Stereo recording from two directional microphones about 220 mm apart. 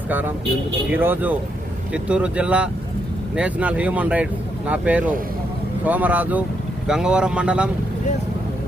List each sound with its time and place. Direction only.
0.1 s speech: 10° right (ahead or behind)